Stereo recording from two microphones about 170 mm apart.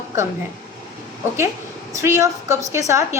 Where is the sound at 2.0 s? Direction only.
20° right (ahead or behind).